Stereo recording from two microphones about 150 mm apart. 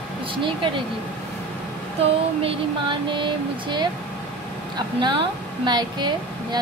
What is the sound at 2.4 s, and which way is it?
A woman's voice, 35° right (ahead or behind).